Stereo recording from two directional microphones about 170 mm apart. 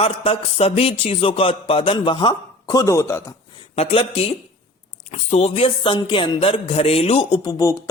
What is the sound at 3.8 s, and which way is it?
A man's voice, 35° left (ahead or behind).